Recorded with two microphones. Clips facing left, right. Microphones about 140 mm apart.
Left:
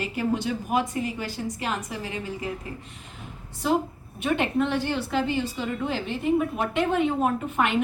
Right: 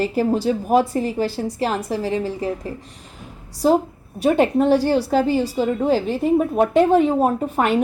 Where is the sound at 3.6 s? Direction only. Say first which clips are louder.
Right 7 dB; 40° right (ahead or behind).